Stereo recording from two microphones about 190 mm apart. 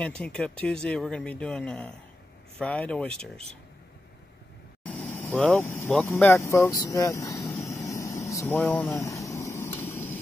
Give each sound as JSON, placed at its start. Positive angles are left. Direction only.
{"t": 0.0, "sound": "speech", "side_deg": 5}
{"t": 4.8, "sound": "speech", "side_deg": 10}
{"t": 7.6, "sound": "vehicle", "side_deg": 15}